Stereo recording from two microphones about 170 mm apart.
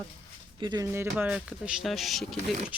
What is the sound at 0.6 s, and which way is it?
Speech, 25° right (ahead or behind).